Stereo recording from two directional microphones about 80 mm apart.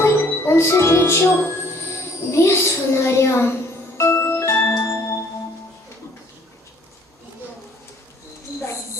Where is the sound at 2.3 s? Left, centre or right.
Left.